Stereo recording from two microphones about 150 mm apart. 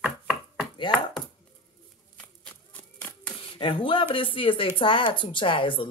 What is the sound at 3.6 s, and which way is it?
Speech, 35° left (ahead or behind).